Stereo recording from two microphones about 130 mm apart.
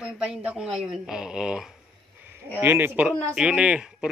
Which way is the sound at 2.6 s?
15° right (ahead or behind).